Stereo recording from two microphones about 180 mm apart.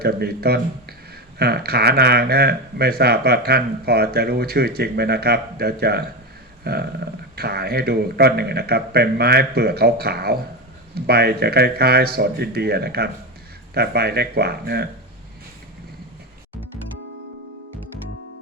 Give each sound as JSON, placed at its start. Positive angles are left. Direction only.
{"t": 0.0, "sound": "speech", "side_deg": -60}